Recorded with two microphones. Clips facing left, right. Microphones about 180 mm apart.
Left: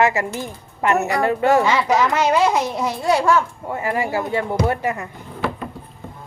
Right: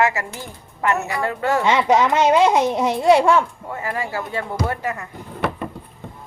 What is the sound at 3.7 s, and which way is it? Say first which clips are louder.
A woman's voice: left 4 dB; 20° left (ahead or behind).